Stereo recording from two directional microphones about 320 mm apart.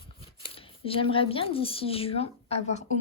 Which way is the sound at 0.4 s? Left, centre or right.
Centre.